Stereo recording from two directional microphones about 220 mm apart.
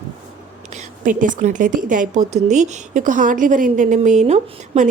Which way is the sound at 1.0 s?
35° right (ahead or behind).